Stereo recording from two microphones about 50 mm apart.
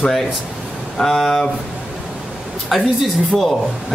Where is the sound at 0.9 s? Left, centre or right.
Centre.